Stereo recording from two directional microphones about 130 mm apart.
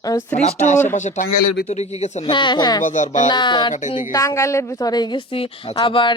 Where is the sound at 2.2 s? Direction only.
35° left (ahead or behind).